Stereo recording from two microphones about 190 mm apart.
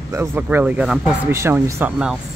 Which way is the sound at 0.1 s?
15° right (ahead or behind).